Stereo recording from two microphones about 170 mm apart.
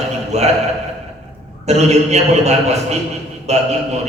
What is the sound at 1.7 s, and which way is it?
A man's voice, 40° right (ahead or behind).